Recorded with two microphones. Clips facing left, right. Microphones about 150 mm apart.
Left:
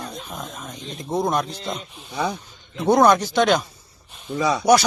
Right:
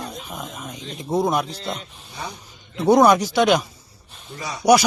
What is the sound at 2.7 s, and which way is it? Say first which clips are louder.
Speech: right 1 dB; 10° right (ahead or behind).